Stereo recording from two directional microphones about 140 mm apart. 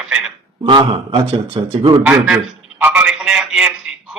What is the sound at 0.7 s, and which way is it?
A man's voice, 35° right (ahead or behind).